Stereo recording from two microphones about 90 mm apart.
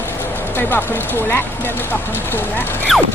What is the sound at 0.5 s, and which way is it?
Speech, 20° left (ahead or behind).